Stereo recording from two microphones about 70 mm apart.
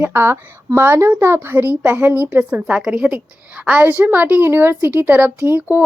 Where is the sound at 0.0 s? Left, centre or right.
Right.